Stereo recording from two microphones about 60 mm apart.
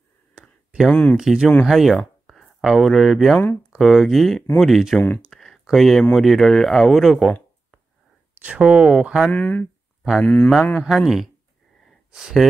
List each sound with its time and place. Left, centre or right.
0.3 s a sound: centre
0.8 s speech: left
1.1 s speech: centre
1.7 s speech: centre
4.9 s speech: left
5.3 s a sound: centre
6.1 s speech: centre
8.4 s speech: centre
9.3 s speech: left
10.8 s speech: centre